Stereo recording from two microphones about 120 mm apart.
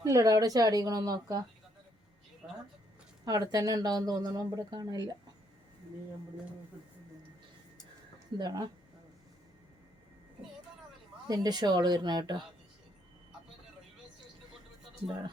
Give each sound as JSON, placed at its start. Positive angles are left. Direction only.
{"t": 0.0, "sound": "speech", "side_deg": -30}
{"t": 3.2, "sound": "speech", "side_deg": -30}
{"t": 8.4, "sound": "speech", "side_deg": -35}
{"t": 11.3, "sound": "speech", "side_deg": -35}